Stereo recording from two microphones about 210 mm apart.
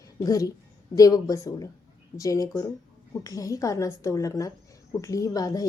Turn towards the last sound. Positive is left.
turn(degrees=15)  # may be behind; listen again after turning